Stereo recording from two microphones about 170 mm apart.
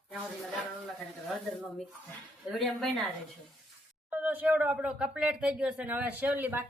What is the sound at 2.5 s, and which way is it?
Speech, centre (ahead or behind).